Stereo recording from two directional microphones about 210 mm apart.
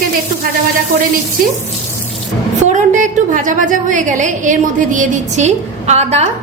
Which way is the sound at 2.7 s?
35° right (ahead or behind).